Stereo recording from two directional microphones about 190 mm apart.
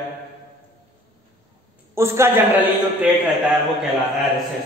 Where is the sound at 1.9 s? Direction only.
15° right (ahead or behind).